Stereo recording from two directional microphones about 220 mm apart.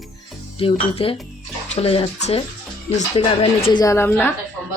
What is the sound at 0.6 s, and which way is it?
A woman's voice, 25° left (ahead or behind).